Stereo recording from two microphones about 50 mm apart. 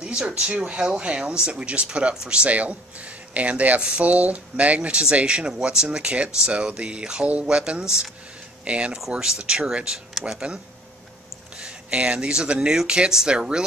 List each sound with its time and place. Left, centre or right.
0.0 s a sound: right
0.4 s speech: right
11.5 s speech: centre